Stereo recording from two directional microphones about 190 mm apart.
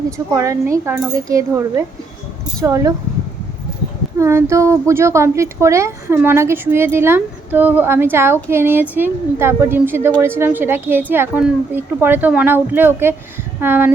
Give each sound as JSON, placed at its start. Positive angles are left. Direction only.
{"t": 0.3, "sound": "a woman's voice", "side_deg": -15}
{"t": 4.2, "sound": "a woman's voice", "side_deg": -15}